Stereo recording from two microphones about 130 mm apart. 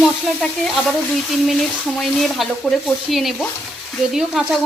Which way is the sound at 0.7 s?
Centre (ahead or behind).